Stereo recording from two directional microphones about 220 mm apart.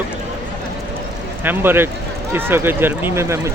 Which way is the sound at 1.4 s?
10° right (ahead or behind).